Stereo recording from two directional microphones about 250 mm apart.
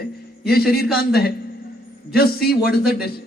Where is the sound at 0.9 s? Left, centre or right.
Left.